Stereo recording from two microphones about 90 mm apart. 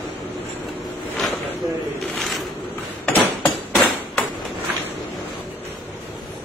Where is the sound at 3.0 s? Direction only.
15° left (ahead or behind).